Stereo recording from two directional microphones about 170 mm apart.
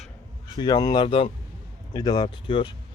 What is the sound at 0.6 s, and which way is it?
Speech, 25° left (ahead or behind).